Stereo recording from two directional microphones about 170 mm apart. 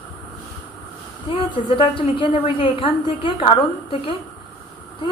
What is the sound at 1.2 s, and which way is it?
A woman's voice, 30° left (ahead or behind).